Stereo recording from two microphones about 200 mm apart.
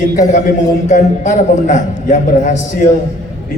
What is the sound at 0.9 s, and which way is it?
A man's voice, 35° left (ahead or behind).